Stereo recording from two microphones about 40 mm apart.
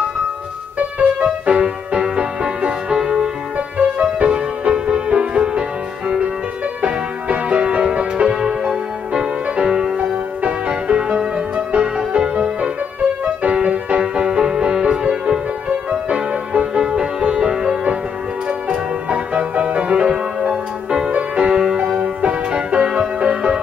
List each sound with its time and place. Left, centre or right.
0.7 s music: right
1.6 s music: right
3.2 s music: right
18.5 s music: right
22.0 s music: right